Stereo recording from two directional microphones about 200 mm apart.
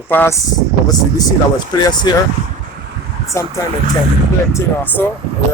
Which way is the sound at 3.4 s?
15° left (ahead or behind).